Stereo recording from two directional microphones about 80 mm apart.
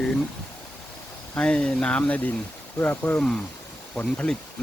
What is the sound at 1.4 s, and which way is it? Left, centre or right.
Speech, centre.